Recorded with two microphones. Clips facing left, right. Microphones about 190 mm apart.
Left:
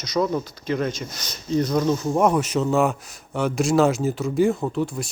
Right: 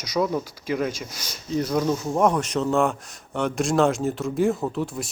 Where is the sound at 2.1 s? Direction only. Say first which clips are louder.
Left 1 dB; 5° left (ahead or behind).